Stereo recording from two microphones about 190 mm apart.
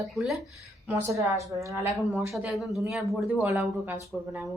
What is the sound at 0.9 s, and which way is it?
Speech, 15° right (ahead or behind).